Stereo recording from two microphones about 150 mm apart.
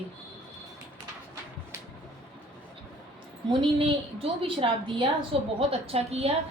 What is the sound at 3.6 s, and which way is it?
A woman's voice, 40° right (ahead or behind).